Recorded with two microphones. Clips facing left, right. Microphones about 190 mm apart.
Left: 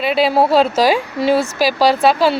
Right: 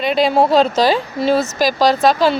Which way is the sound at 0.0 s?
5° left (ahead or behind).